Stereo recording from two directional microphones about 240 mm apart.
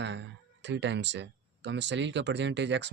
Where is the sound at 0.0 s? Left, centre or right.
Right.